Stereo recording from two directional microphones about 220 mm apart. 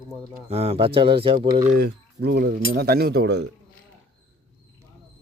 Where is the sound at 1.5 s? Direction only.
45° right (ahead or behind).